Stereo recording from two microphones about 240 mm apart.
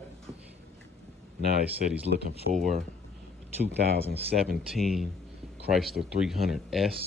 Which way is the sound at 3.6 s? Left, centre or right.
Right.